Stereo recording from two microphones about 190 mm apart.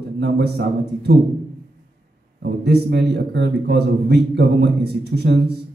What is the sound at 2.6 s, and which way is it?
Speech, 60° right (ahead or behind).